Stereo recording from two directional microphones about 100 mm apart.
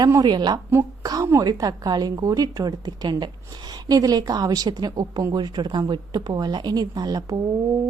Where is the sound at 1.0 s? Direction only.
35° right (ahead or behind).